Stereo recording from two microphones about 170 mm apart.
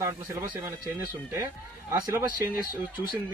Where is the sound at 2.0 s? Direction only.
15° right (ahead or behind).